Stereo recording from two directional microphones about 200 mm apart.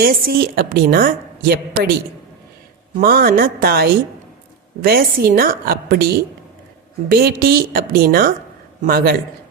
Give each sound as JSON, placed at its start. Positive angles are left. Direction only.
{"t": 0.0, "sound": "a woman's voice", "side_deg": -50}
{"t": 3.0, "sound": "a woman's voice", "side_deg": -45}